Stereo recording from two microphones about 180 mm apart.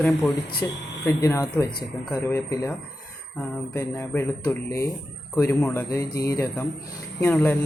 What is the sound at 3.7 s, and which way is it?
Speech, 15° left (ahead or behind).